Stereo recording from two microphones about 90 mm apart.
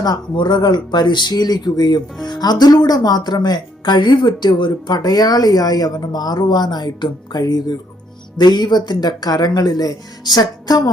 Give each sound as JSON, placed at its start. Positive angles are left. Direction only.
{"t": 0.0, "sound": "speech", "side_deg": 50}